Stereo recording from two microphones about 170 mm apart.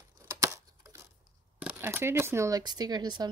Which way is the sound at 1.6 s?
15° right (ahead or behind).